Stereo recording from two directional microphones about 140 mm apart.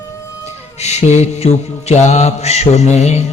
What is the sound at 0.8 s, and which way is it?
Speech, 50° left (ahead or behind).